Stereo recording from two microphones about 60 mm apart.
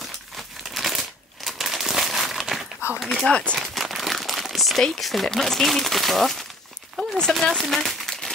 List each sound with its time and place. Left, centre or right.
0.7 s crumpling: centre
3.0 s a sound: centre
3.3 s speech: centre
3.5 s speech: centre